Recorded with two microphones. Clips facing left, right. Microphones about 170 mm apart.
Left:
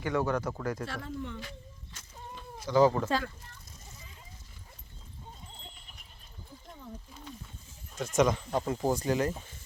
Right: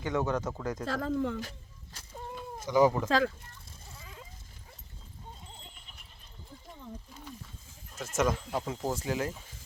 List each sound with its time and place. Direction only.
0.0 s speech: 20° right (ahead or behind)
0.9 s speech: 90° right
1.4 s speech: 40° right (ahead or behind)
2.6 s speech: 15° right (ahead or behind)
3.1 s speech: 90° right
7.9 s speech: 5° right (ahead or behind)